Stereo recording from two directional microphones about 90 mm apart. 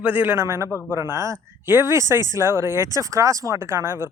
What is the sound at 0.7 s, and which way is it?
Speech, 30° left (ahead or behind).